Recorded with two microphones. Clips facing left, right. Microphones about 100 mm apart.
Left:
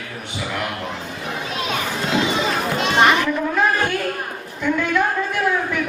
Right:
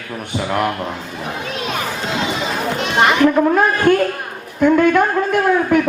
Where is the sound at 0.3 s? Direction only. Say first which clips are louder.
Right 8 dB; 50° right (ahead or behind).